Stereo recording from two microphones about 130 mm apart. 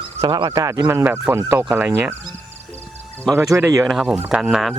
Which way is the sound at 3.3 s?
20° right (ahead or behind).